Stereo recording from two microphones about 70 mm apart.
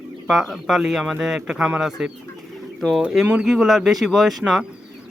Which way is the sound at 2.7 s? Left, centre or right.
Centre.